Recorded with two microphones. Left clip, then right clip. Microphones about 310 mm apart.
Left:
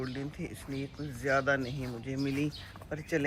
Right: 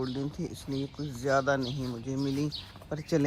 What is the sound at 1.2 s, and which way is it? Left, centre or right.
Speech, right.